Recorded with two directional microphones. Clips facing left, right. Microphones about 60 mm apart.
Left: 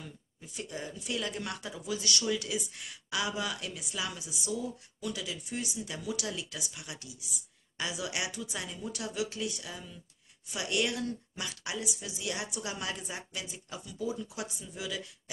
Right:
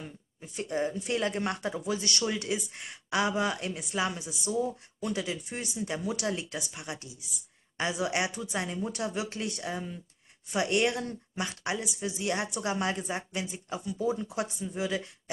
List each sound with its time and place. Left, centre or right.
0.0 s speech: right